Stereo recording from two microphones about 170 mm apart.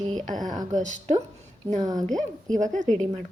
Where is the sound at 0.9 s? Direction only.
40° right (ahead or behind).